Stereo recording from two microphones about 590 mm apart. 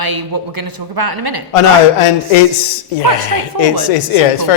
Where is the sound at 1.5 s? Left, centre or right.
Left.